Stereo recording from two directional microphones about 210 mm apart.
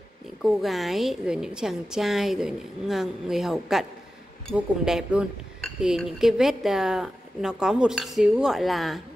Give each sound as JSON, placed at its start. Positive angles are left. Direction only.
{"t": 0.4, "sound": "a woman's voice", "side_deg": 0}